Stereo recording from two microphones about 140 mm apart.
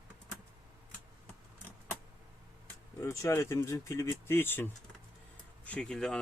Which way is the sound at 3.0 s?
20° left (ahead or behind).